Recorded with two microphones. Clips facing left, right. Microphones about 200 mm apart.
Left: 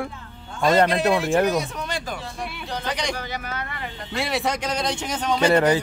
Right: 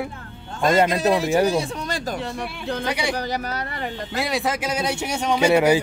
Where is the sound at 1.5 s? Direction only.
35° right (ahead or behind).